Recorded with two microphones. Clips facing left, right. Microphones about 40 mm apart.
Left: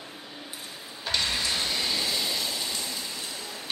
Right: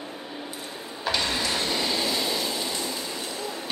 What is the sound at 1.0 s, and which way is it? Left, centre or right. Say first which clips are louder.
Vehicle: right 2 dB; centre.